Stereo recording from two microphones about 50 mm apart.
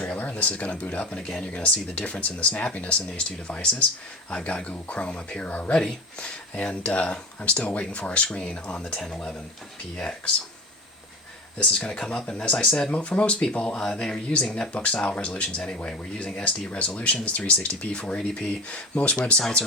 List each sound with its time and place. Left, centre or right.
0.1 s speech: left
1.2 s speech: centre
1.5 s speech: left
11.5 s speech: centre
12.9 s speech: left
14.4 s speech: centre
14.7 s speech: left